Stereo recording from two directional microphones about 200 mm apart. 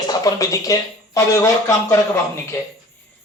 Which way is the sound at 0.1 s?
15° left (ahead or behind).